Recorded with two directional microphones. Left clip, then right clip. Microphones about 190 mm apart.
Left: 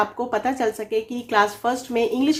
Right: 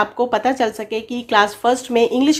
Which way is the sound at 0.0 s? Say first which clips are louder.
Right 5 dB; 35° right (ahead or behind).